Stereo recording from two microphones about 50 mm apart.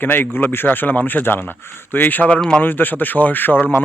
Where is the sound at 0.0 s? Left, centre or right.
Left.